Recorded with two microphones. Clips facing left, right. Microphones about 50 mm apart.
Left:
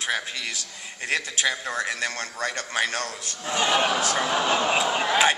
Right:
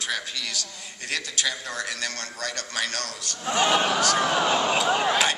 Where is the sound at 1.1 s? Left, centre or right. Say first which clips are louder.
Left 3 dB; left.